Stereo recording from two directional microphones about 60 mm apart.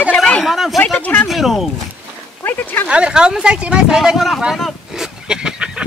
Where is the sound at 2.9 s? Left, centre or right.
Centre.